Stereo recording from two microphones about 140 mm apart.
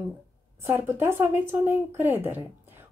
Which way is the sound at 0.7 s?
15° right (ahead or behind).